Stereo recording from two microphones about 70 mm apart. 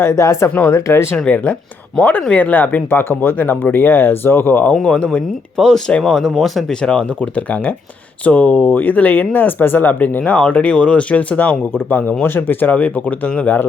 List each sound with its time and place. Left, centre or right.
0.0 s speech: left
1.1 s speech: centre
4.7 s speech: centre
6.8 s speech: centre